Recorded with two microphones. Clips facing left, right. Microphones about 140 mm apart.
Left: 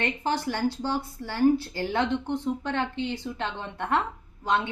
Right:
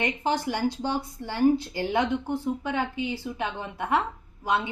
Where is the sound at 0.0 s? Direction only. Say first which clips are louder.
Right 1 dB; 15° right (ahead or behind).